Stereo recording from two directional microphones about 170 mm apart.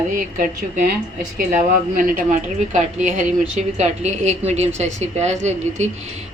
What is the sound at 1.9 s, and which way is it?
A woman's voice, 55° right (ahead or behind).